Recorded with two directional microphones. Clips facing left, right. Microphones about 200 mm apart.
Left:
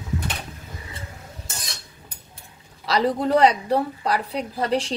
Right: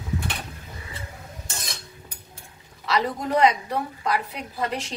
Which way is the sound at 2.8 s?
35° left (ahead or behind).